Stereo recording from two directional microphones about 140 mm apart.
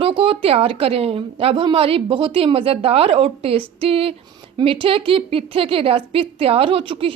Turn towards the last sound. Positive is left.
turn(degrees=-40)  # may be behind; listen again after turning